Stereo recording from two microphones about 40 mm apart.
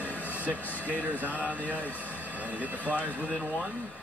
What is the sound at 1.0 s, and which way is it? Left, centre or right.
Speech, right.